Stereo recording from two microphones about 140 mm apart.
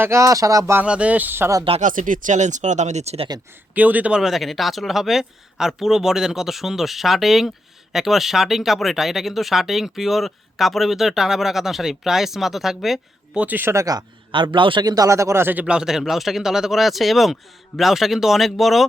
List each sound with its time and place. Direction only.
0.0 s speech: 20° right (ahead or behind)
0.9 s speech: 10° right (ahead or behind)
1.8 s speech: 70° right (ahead or behind); by 3.2 s 50° right (ahead or behind)
3.8 s speech: 10° right (ahead or behind)